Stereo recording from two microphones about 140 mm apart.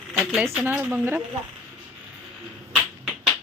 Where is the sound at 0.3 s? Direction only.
Centre (ahead or behind).